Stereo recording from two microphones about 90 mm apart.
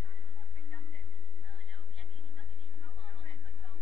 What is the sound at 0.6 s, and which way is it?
Music, 20° left (ahead or behind).